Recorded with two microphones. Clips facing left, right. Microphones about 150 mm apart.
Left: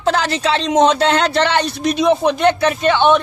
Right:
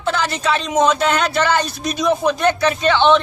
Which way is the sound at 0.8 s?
30° left (ahead or behind).